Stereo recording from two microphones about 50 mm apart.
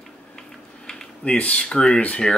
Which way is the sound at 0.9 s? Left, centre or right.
Centre.